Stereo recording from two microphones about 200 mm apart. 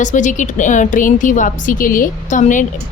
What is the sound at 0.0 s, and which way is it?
A woman's voice, 40° left (ahead or behind).